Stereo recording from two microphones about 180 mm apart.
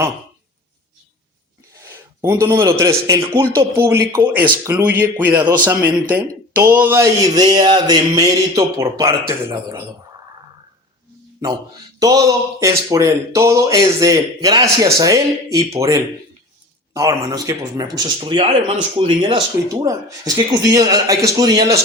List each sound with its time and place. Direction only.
1.8 s a man's voice: 15° right (ahead or behind)
11.9 s speech: 20° right (ahead or behind)